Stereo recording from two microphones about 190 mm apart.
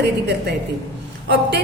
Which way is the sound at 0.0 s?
60° right (ahead or behind).